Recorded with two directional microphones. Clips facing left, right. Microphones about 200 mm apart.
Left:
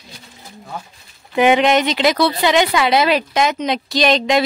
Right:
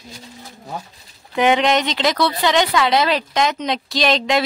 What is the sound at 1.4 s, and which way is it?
Speech, 5° left (ahead or behind).